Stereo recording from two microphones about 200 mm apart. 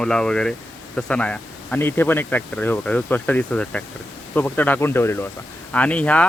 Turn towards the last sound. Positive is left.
turn(degrees=5)  # may be behind; listen again after turning